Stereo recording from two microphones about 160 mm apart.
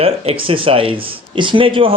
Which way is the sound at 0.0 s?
35° right (ahead or behind).